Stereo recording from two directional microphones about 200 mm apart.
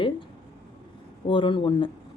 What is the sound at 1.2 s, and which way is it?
Speech, 25° left (ahead or behind).